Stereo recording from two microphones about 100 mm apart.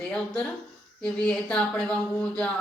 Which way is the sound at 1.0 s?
10° left (ahead or behind).